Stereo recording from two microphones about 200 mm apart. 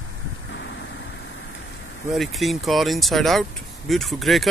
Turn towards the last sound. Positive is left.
turn(degrees=0)  # may be behind; listen again after turning